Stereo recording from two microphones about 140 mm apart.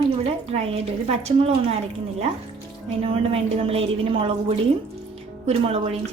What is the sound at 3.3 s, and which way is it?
A woman's voice, 45° right (ahead or behind).